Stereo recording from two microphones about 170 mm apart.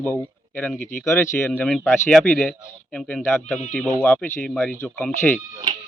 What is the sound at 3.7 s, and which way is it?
Speech, centre (ahead or behind).